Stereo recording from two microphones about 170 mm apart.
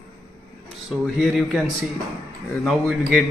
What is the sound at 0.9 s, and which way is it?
A man's voice, centre (ahead or behind).